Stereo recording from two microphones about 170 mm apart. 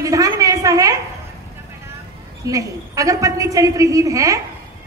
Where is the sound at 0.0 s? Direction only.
20° right (ahead or behind).